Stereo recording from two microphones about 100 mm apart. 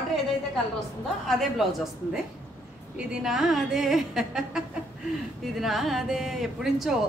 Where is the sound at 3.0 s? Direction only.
5° right (ahead or behind).